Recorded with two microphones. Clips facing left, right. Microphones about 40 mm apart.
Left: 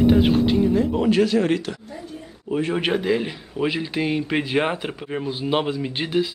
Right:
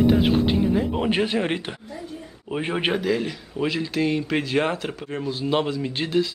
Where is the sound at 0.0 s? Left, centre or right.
Centre.